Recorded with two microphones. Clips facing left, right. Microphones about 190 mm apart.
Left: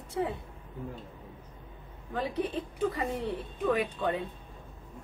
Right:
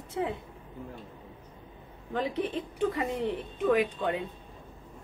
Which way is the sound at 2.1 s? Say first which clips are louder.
Right 1 dB; 15° right (ahead or behind).